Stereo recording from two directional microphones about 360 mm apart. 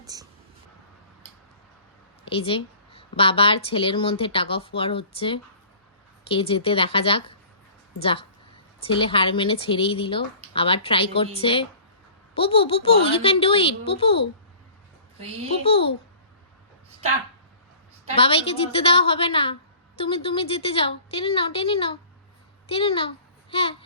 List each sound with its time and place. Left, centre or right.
0.0 s a sound: centre
2.2 s a woman's voice: centre
15.6 s a woman's voice: centre
18.2 s a woman's voice: centre